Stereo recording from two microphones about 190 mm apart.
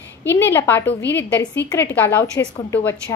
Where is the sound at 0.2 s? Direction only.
10° left (ahead or behind).